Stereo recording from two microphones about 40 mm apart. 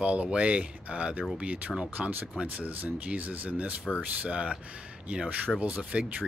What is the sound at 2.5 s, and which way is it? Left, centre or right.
Speech, right.